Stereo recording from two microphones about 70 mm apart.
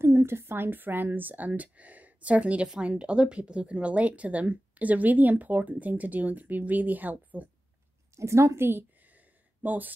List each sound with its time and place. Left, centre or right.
0.0 s a woman's voice: right
8.2 s a woman's voice: right
9.6 s speech: right